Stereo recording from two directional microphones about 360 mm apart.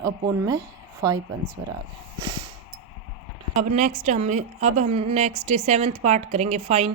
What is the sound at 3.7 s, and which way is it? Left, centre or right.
A woman's voice, centre.